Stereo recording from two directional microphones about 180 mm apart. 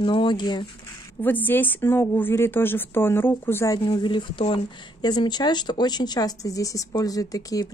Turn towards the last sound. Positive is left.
turn(degrees=20)  # may be behind; listen again after turning